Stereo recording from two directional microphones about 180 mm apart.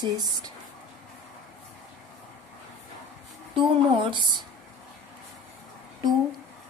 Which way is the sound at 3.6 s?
25° right (ahead or behind).